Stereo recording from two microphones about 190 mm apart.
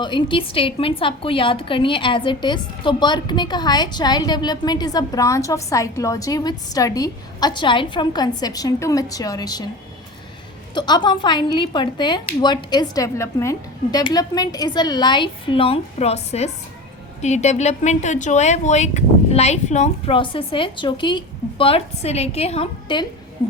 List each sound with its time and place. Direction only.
0.0 s a woman's voice: 25° left (ahead or behind)
10.8 s a woman's voice: 25° left (ahead or behind)